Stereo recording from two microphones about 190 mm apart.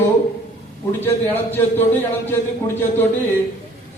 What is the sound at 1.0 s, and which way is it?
A man's voice, 10° left (ahead or behind).